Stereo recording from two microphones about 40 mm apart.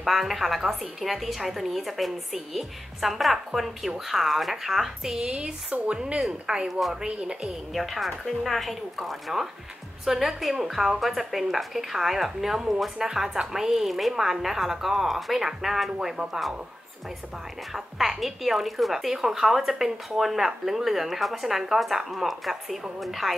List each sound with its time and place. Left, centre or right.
0.0 s a woman's voice: centre; by 7.5 s right
7.7 s a woman's voice: centre
17.7 s speech: centre